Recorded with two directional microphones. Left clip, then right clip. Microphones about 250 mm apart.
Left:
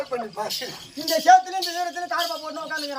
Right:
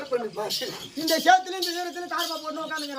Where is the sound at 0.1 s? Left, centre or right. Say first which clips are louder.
Even; centre.